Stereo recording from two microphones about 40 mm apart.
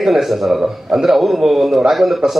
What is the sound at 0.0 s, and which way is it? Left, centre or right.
A man's voice, centre.